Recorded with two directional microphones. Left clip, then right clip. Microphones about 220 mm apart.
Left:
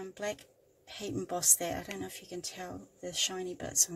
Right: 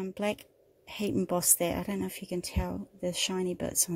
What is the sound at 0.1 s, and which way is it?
Speech, 35° right (ahead or behind).